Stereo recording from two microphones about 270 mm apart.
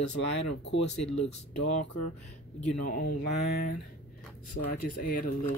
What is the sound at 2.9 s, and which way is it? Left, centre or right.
Speech, left.